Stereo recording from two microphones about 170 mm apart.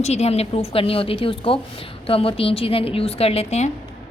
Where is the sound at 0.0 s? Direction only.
40° left (ahead or behind).